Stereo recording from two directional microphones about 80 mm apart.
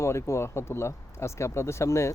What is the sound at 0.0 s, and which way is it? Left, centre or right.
Speech, left.